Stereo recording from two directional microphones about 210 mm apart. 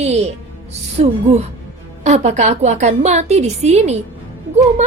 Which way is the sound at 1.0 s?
30° right (ahead or behind).